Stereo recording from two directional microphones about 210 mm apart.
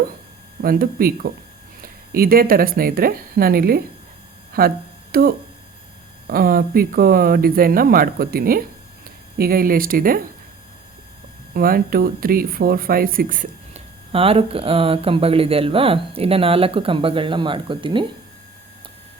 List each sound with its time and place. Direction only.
0.6 s speech: 45° right (ahead or behind)
11.5 s speech: 45° right (ahead or behind)
14.1 s speech: 25° right (ahead or behind)